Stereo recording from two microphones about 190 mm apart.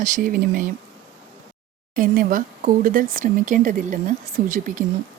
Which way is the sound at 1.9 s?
50° right (ahead or behind).